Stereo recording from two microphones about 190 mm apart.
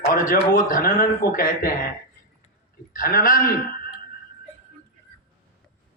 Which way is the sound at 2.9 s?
50° left (ahead or behind).